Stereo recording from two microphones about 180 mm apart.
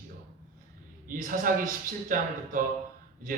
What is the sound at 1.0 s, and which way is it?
A woman's voice, 50° right (ahead or behind).